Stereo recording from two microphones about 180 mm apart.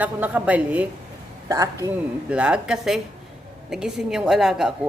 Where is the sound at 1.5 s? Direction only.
20° right (ahead or behind).